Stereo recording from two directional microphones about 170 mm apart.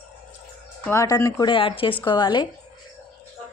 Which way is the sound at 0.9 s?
20° left (ahead or behind).